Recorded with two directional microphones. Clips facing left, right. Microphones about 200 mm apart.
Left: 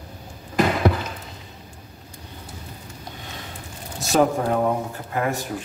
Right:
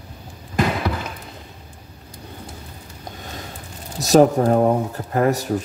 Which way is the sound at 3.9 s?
40° right (ahead or behind).